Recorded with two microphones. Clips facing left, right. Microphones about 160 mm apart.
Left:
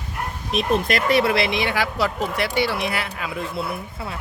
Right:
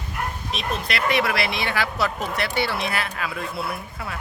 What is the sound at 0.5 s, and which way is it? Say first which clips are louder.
Speech: left 9 dB; 50° left (ahead or behind).